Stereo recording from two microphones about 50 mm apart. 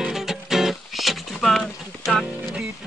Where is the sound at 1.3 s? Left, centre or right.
Centre.